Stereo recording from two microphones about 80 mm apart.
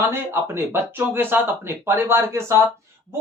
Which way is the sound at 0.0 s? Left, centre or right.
Right.